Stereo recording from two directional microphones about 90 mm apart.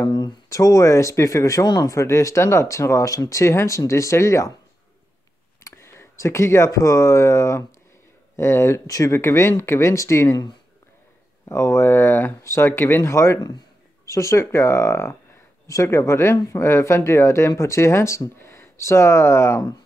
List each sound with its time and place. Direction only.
0.0 s speech: 45° left (ahead or behind)
5.6 s speech: 30° left (ahead or behind)
11.4 s speech: 35° left (ahead or behind)